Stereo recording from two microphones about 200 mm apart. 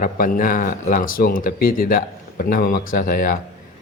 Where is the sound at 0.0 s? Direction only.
45° left (ahead or behind).